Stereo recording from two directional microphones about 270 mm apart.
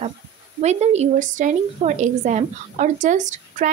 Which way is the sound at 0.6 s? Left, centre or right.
Right.